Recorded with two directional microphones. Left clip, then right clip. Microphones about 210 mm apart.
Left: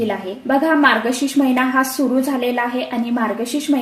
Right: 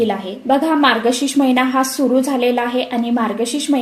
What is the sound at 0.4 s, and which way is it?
A woman's voice, 30° right (ahead or behind).